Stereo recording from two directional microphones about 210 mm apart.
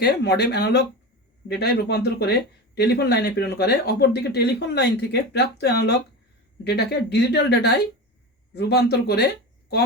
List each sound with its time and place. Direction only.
0.0 s speech: 50° left (ahead or behind)